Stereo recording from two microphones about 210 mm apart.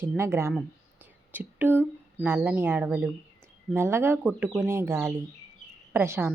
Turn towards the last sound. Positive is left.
turn(degrees=-10)  # may be behind; listen again after turning